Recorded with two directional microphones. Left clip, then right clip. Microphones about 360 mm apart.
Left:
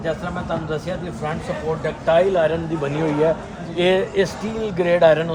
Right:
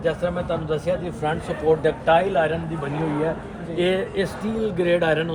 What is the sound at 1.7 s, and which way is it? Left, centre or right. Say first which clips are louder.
Speech: right 7 dB; centre.